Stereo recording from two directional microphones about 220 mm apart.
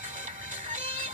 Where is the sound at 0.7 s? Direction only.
35° right (ahead or behind).